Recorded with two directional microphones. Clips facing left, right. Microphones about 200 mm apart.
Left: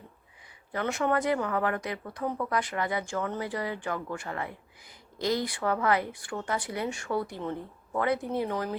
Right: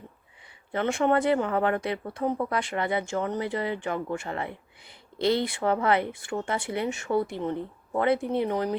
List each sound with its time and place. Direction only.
0.7 s speech: 25° right (ahead or behind)